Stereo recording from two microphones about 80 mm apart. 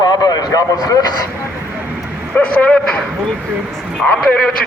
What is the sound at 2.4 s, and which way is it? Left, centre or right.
Speech, centre.